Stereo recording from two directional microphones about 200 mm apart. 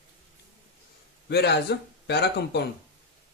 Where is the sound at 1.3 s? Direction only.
55° left (ahead or behind).